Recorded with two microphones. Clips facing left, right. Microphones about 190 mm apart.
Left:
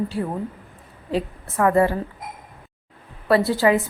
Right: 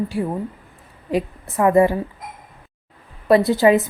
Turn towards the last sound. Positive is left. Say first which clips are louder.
# right 4 dB
turn(degrees=-20)  # may be behind; listen again after turning